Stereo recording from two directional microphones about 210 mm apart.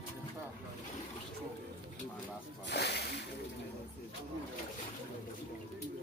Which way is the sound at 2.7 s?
55° left (ahead or behind).